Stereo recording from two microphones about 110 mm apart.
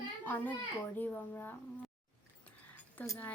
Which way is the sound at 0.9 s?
15° left (ahead or behind).